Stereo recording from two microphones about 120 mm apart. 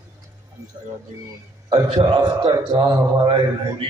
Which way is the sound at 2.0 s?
40° right (ahead or behind).